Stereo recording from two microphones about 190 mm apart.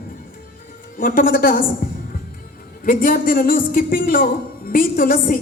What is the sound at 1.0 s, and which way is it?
Speech, 50° left (ahead or behind).